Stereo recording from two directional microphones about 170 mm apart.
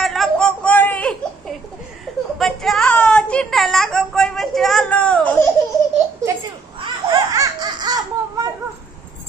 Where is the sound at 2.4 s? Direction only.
Centre (ahead or behind).